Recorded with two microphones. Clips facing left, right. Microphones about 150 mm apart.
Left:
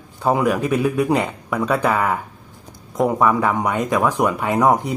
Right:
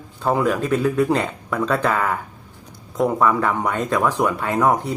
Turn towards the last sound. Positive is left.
turn(degrees=15)  # may be behind; listen again after turning